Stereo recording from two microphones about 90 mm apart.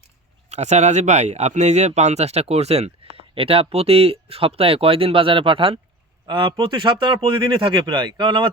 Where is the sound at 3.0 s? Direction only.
90° right.